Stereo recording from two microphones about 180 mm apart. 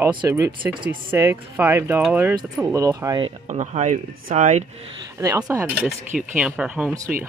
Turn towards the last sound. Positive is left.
turn(degrees=-5)  # may be behind; listen again after turning